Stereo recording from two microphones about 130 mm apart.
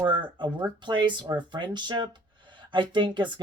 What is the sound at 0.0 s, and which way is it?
Speech, 35° right (ahead or behind).